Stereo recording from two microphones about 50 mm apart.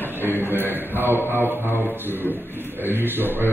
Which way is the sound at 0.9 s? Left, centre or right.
Right.